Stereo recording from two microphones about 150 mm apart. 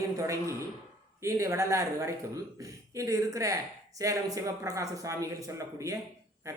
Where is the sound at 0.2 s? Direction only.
20° right (ahead or behind).